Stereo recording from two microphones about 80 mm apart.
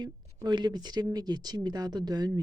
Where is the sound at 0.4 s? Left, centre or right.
Right.